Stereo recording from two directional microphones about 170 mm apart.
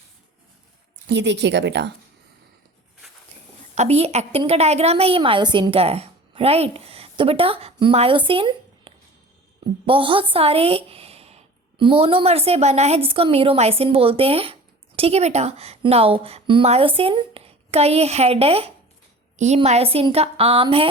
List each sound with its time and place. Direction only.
1.0 s speech: 90° right
3.8 s a woman's voice: 35° right (ahead or behind)